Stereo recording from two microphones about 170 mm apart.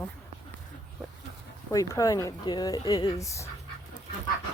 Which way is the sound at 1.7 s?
20° left (ahead or behind).